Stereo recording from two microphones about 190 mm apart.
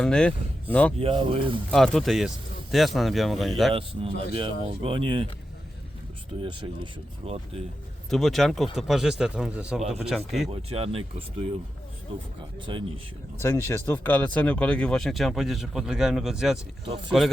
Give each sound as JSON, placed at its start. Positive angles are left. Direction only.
{"t": 0.0, "sound": "speech", "side_deg": 5}
{"t": 0.9, "sound": "speech", "side_deg": -30}
{"t": 1.7, "sound": "speech", "side_deg": 0}
{"t": 3.8, "sound": "speech", "side_deg": -30}
{"t": 6.4, "sound": "speech", "side_deg": -25}
{"t": 8.1, "sound": "speech", "side_deg": 0}
{"t": 9.8, "sound": "speech", "side_deg": -35}
{"t": 10.1, "sound": "speech", "side_deg": 0}
{"t": 10.5, "sound": "speech", "side_deg": -30}
{"t": 12.7, "sound": "speech", "side_deg": -25}
{"t": 13.4, "sound": "speech", "side_deg": 10}
{"t": 16.8, "sound": "speech", "side_deg": -30}